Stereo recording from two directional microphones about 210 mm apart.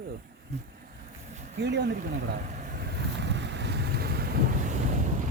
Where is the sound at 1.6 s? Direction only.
55° right (ahead or behind).